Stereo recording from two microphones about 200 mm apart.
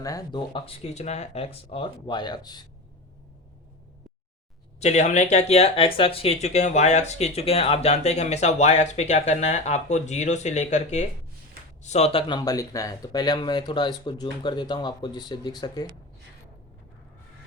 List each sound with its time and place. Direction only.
0.0 s speech: 20° left (ahead or behind)
4.8 s speech: 35° left (ahead or behind)